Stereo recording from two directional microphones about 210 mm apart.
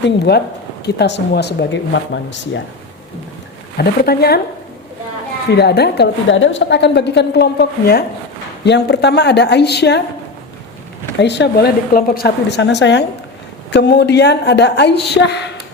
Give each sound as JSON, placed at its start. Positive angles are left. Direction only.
{"t": 0.0, "sound": "a woman's voice", "side_deg": 50}
{"t": 3.8, "sound": "a woman's voice", "side_deg": 50}
{"t": 5.5, "sound": "a woman's voice", "side_deg": 50}
{"t": 11.2, "sound": "a woman's voice", "side_deg": 55}